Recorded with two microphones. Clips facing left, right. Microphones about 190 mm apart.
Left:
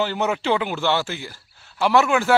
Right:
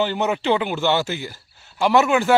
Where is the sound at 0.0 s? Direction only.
Centre (ahead or behind).